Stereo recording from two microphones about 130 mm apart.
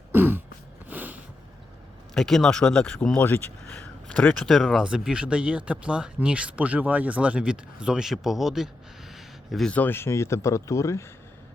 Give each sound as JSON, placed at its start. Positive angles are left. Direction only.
{"t": 0.1, "sound": "throat clearing", "side_deg": -15}
{"t": 0.9, "sound": "a sound", "side_deg": -10}
{"t": 2.1, "sound": "speech", "side_deg": 5}
{"t": 3.2, "sound": "speech", "side_deg": 15}
{"t": 9.1, "sound": "a sound", "side_deg": 0}
{"t": 9.7, "sound": "speech", "side_deg": 15}